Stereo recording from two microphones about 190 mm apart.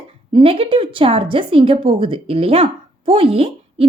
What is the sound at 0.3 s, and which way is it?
A woman's voice, 30° right (ahead or behind).